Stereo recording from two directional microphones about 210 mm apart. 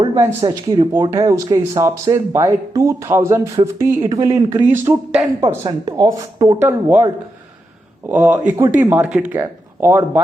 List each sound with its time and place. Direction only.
0.3 s speech: 20° right (ahead or behind)